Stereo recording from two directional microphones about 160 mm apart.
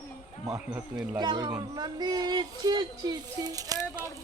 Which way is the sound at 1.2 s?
25° right (ahead or behind).